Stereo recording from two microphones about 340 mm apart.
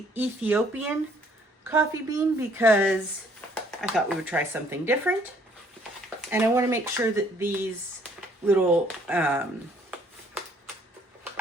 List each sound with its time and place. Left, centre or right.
0.1 s speech: centre
6.3 s speech: centre